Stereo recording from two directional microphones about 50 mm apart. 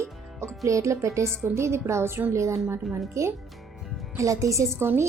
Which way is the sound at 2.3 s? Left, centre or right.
Right.